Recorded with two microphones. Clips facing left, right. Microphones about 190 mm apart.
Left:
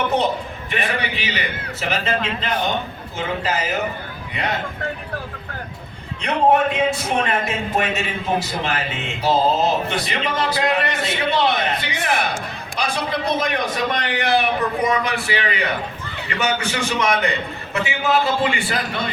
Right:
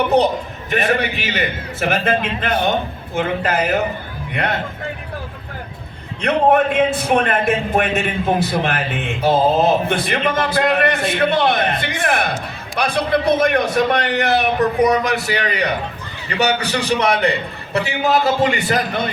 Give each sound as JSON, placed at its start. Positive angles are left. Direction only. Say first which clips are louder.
{"t": 0.7, "sound": "a man's voice", "louder": "right 6 dB", "side_deg": -45}
{"t": 6.2, "sound": "a man's voice", "louder": "right 2 dB", "side_deg": -55}
{"t": 14.0, "sound": "a man's voice", "louder": "right 2 dB", "side_deg": -40}